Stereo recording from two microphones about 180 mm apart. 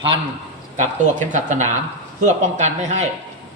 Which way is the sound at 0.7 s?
45° right (ahead or behind).